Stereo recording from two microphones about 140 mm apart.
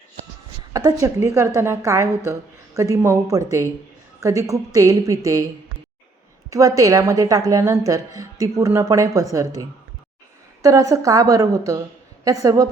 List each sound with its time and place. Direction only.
0.7 s a woman's voice: 25° right (ahead or behind)
6.5 s a woman's voice: 25° right (ahead or behind)